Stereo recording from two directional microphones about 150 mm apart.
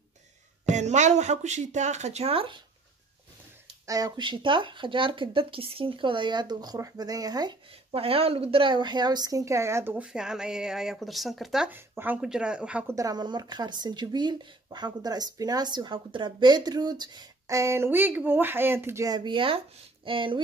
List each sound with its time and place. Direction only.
0.7 s speech: 50° right (ahead or behind)
3.8 s speech: 25° right (ahead or behind)
7.9 s a woman's voice: 40° right (ahead or behind); by 11.7 s centre (ahead or behind)
11.7 s a woman's voice: 15° right (ahead or behind)
12.9 s speech: 25° right (ahead or behind)